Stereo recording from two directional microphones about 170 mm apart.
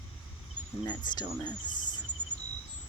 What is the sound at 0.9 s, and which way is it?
Speech, 25° left (ahead or behind).